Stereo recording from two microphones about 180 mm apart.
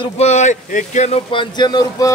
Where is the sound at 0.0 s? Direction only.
35° left (ahead or behind).